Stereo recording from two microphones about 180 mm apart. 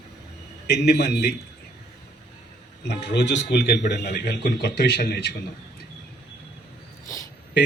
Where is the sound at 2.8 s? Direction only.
75° left (ahead or behind).